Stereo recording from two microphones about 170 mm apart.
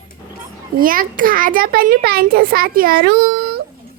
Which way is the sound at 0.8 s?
55° right (ahead or behind).